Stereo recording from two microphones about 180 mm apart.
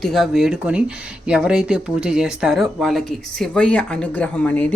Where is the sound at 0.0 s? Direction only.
Centre (ahead or behind).